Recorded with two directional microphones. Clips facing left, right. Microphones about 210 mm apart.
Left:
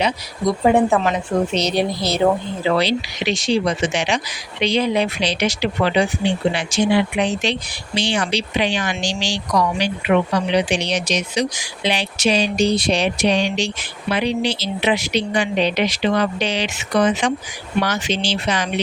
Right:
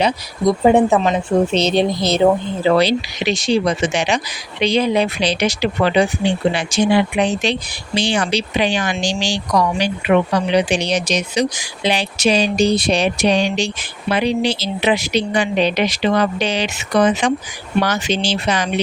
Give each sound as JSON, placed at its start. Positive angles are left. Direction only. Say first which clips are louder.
{"t": 0.6, "sound": "speech", "louder": "right 2 dB", "side_deg": -20}
{"t": 2.6, "sound": "speech", "louder": "right 4 dB", "side_deg": -40}
{"t": 4.6, "sound": "a sound", "louder": "right 2 dB", "side_deg": -40}
{"t": 6.5, "sound": "speech", "louder": "right 2 dB", "side_deg": -45}
{"t": 10.5, "sound": "a sound", "louder": "right 3 dB", "side_deg": -40}
{"t": 14.1, "sound": "speech", "louder": "right 3 dB", "side_deg": -40}